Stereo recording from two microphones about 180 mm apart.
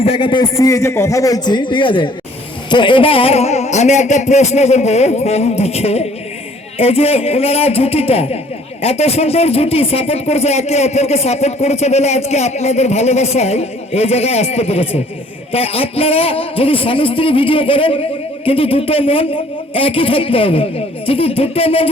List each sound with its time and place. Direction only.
0.0 s a man's voice: 30° left (ahead or behind)